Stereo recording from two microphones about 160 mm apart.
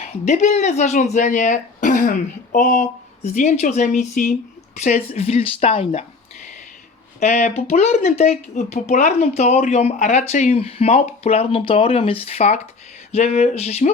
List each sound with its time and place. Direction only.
0.0 s speech: 50° left (ahead or behind)
7.2 s speech: 50° left (ahead or behind)